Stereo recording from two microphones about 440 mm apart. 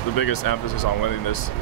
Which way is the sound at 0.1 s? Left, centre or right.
Left.